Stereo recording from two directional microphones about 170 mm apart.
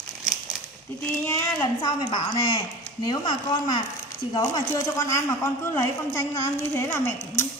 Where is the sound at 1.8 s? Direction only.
25° left (ahead or behind).